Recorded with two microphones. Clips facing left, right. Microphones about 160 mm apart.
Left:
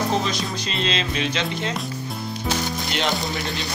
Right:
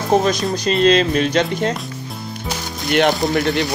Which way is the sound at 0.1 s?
50° right (ahead or behind).